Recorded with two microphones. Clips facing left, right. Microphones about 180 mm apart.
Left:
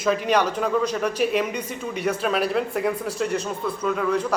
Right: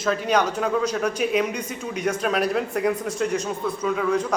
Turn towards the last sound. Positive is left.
turn(degrees=0)  # may be behind; listen again after turning